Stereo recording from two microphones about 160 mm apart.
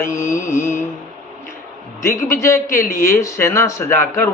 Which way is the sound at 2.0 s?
15° left (ahead or behind).